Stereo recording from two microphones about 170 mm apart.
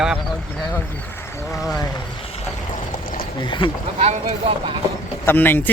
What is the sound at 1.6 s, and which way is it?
Speech, 20° left (ahead or behind).